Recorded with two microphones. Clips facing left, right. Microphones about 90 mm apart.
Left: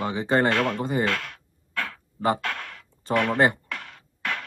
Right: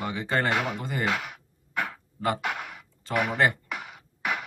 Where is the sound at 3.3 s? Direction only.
30° left (ahead or behind).